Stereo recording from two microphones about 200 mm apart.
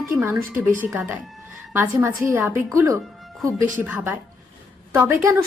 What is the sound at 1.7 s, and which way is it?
Speech, 15° right (ahead or behind).